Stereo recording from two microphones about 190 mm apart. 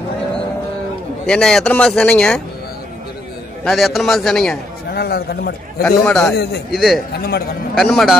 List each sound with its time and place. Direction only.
1.2 s speech: 5° left (ahead or behind)
3.6 s speech: centre (ahead or behind)
4.9 s speech: 55° left (ahead or behind)
5.8 s speech: 5° left (ahead or behind)
6.3 s speech: 60° left (ahead or behind)
6.7 s speech: centre (ahead or behind)
7.2 s speech: 55° left (ahead or behind)
7.7 s speech: centre (ahead or behind)